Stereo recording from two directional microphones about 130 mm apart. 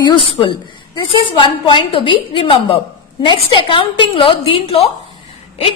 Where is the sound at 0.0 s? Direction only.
40° left (ahead or behind).